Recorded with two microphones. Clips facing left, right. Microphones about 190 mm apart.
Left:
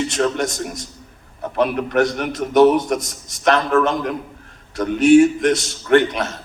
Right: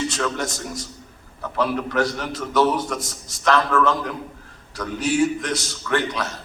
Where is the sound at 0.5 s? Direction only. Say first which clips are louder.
Left 3 dB; 20° left (ahead or behind).